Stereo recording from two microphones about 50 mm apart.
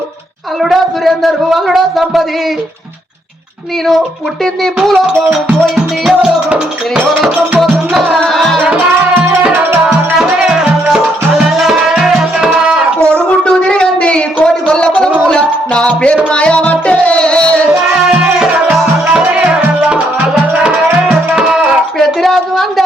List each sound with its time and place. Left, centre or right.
0.6 s a woman's voice: centre
4.6 s a woman's voice: centre
5.7 s music: centre
7.7 s tabla: centre
8.3 s music: centre
10.2 s music: centre
13.1 s a sound: left
15.3 s music: centre
19.4 s music: right
21.9 s a sound: centre